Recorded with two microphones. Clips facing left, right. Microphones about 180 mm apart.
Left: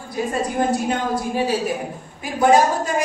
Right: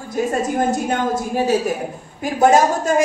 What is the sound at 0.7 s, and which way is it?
A woman's voice, 45° right (ahead or behind).